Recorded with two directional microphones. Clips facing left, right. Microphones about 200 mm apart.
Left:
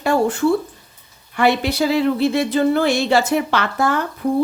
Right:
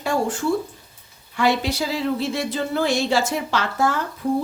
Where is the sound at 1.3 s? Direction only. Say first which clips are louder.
Left 4 dB; 60° left (ahead or behind).